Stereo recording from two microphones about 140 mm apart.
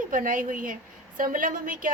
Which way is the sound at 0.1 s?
70° right (ahead or behind).